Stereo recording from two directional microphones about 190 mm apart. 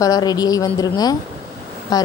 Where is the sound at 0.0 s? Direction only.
20° left (ahead or behind).